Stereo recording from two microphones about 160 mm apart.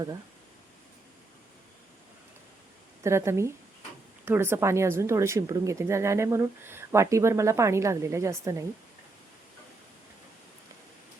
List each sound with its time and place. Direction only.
3.0 s speech: 15° right (ahead or behind)